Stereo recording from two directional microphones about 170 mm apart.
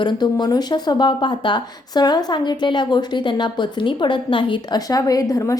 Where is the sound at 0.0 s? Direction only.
25° left (ahead or behind).